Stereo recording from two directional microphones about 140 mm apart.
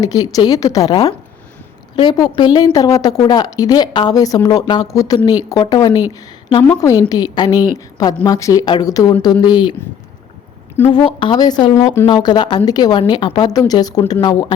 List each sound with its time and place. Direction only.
0.0 s a woman's voice: 25° left (ahead or behind)
10.9 s a woman's voice: 35° left (ahead or behind)